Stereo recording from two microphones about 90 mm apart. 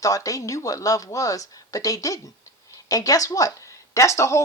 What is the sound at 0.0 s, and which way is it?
Speech, 40° left (ahead or behind).